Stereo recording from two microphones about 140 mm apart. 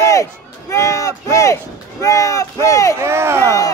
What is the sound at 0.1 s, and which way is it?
Speech, 20° left (ahead or behind).